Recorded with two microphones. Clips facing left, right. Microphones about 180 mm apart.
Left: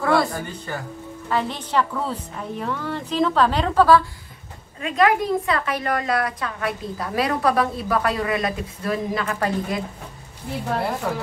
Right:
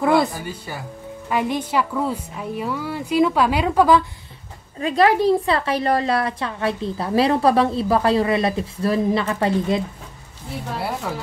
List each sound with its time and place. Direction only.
0.0 s a woman's voice: 20° right (ahead or behind)
0.3 s a woman's voice: 10° right (ahead or behind)
4.7 s a woman's voice: 35° right (ahead or behind)